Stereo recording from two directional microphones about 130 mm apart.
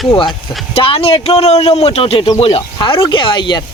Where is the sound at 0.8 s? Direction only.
45° left (ahead or behind).